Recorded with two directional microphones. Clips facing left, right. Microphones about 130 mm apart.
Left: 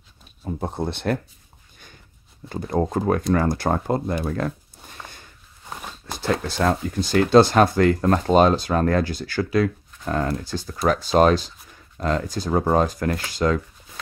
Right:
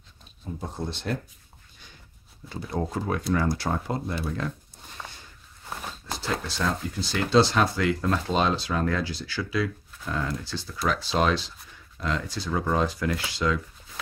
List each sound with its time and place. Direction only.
0.4 s speech: 55° left (ahead or behind)
2.5 s speech: 45° left (ahead or behind)
5.0 s walk: centre (ahead or behind)
5.7 s a sound: centre (ahead or behind)
6.4 s speech: 55° left (ahead or behind)